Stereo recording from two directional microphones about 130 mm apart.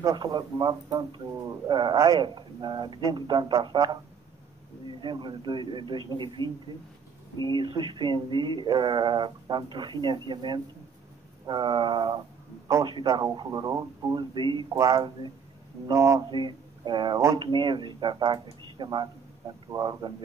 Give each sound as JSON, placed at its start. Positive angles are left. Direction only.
{"t": 0.0, "sound": "speech", "side_deg": -30}
{"t": 5.0, "sound": "speech", "side_deg": -35}
{"t": 14.7, "sound": "speech", "side_deg": -25}
{"t": 16.3, "sound": "speech", "side_deg": -35}